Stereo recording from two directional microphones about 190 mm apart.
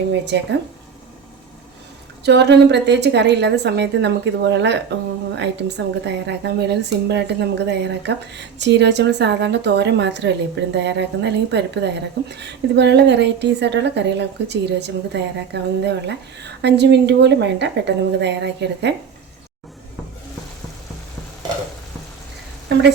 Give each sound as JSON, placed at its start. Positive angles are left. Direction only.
{"t": 2.2, "sound": "a woman's voice", "side_deg": -65}